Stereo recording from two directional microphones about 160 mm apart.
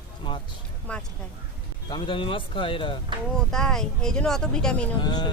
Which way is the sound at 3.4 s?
5° left (ahead or behind).